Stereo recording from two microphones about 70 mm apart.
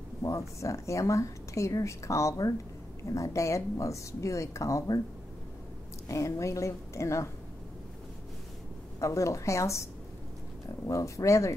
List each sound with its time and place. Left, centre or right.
0.2 s a woman's voice: left
6.0 s a woman's voice: left
9.0 s a woman's voice: left
10.9 s a woman's voice: left